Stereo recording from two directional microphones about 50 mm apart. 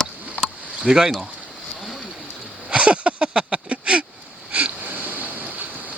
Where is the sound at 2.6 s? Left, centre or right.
Right.